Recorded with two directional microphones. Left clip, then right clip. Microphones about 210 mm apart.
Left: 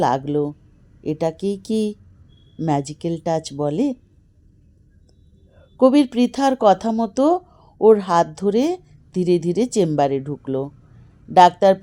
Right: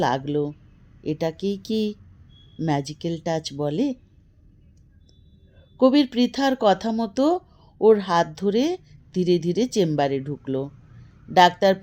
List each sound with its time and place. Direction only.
0.0 s speech: 15° left (ahead or behind)
5.7 s speech: 15° left (ahead or behind)